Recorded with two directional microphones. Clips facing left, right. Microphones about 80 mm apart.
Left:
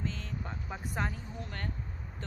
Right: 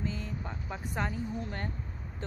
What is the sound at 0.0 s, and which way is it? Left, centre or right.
Vehicle, centre.